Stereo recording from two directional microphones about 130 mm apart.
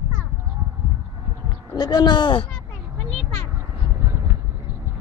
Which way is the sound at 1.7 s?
35° left (ahead or behind).